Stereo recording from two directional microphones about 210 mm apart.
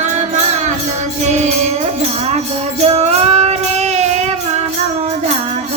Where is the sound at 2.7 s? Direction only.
30° right (ahead or behind).